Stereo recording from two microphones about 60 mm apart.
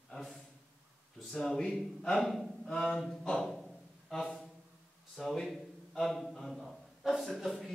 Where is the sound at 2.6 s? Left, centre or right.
Centre.